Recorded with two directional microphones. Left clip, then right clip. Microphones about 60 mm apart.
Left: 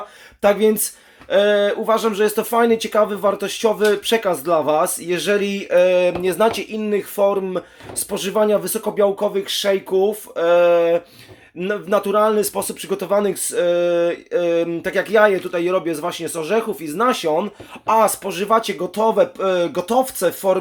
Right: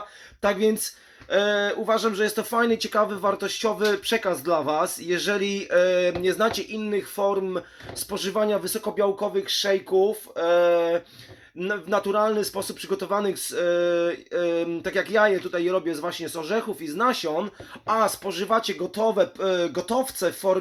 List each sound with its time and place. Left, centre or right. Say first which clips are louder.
0.4 s speech: left 7 dB; left
18.9 s speech: left 6 dB; centre